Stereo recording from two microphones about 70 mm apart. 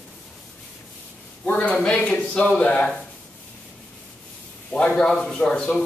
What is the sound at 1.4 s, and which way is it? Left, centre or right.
Speech, left.